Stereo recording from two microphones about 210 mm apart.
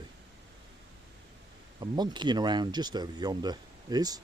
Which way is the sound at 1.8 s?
20° right (ahead or behind).